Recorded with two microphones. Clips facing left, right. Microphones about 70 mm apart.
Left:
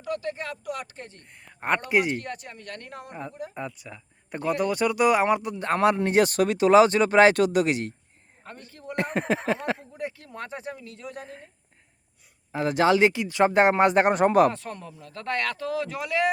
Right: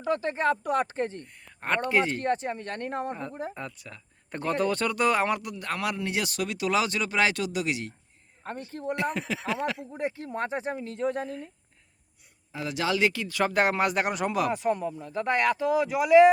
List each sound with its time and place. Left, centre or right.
0.1 s speech: right
1.2 s speech: centre
2.1 s speech: right
3.5 s speech: centre; by 7.9 s left
8.7 s speech: right
9.1 s speech: left
9.9 s speech: right
12.5 s speech: left
14.5 s speech: centre